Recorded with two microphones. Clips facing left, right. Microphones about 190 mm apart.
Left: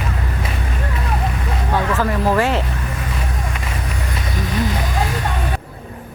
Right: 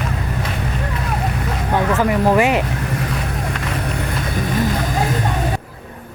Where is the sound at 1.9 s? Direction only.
15° right (ahead or behind).